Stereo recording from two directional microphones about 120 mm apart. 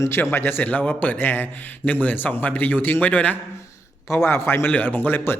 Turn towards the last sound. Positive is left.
turn(degrees=15)  # may be behind; listen again after turning